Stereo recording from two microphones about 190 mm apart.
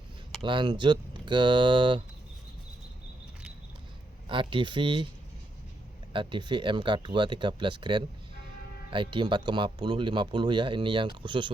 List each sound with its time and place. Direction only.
0.4 s speech: 25° right (ahead or behind)
4.3 s speech: 25° right (ahead or behind)
6.1 s speech: 25° right (ahead or behind)